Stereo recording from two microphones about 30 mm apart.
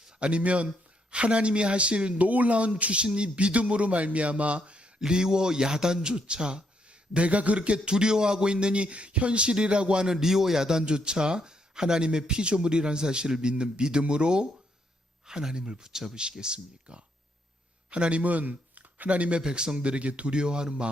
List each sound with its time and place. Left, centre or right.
0.2 s a man's voice: right
2.2 s a man's voice: right
4.9 s a man's voice: right
7.1 s a man's voice: right
10.1 s a man's voice: centre
16.4 s a man's voice: right
17.9 s speech: right
19.4 s a man's voice: right
19.7 s a man's voice: right
20.3 s a man's voice: right